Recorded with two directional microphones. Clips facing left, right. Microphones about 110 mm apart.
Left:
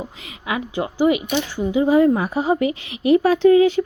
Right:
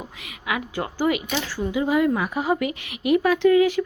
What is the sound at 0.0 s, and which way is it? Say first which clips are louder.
Speech: left 3 dB; 30° left (ahead or behind).